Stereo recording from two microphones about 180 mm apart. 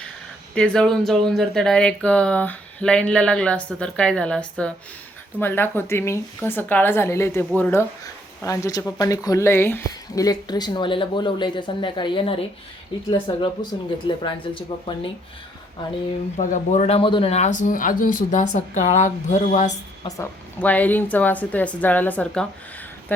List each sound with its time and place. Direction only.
0.5 s speech: 5° left (ahead or behind); by 15.1 s 30° left (ahead or behind)
16.4 s speech: 40° left (ahead or behind)
20.1 s speech: 15° left (ahead or behind)